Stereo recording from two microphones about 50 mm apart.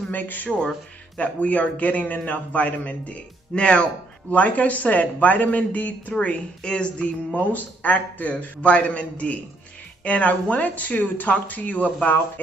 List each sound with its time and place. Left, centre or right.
0.1 s speech: left
0.5 s speech: centre
6.6 s a sound: centre
7.3 s speech: left